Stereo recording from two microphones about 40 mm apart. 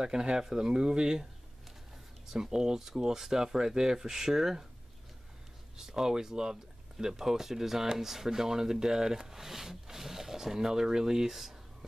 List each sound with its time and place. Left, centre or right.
0.0 s speech: centre
2.3 s speech: centre
5.8 s speech: centre